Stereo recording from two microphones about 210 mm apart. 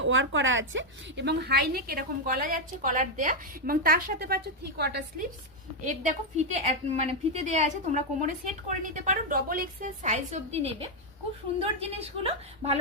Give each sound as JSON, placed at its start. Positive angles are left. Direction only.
{"t": 0.0, "sound": "a woman's voice", "side_deg": -65}
{"t": 5.8, "sound": "a woman's voice", "side_deg": -35}